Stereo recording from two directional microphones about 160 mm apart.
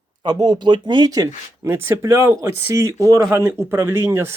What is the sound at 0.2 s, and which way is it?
Speech, 25° right (ahead or behind).